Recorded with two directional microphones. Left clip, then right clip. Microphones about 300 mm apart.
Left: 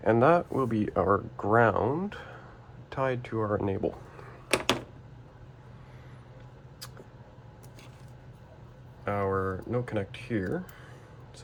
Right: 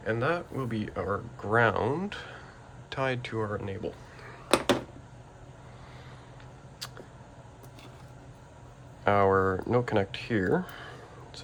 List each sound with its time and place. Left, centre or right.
0.0 s speech: centre
4.4 s a sound: centre
9.0 s speech: centre